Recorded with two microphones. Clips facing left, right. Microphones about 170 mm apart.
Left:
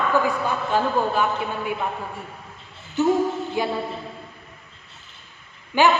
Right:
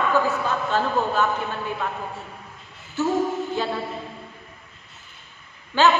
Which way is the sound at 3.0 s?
15° left (ahead or behind).